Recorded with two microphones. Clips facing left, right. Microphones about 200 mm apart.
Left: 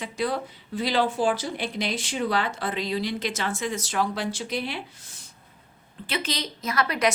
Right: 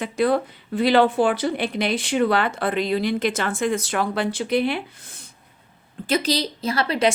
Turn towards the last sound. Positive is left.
turn(degrees=-30)  # may be behind; listen again after turning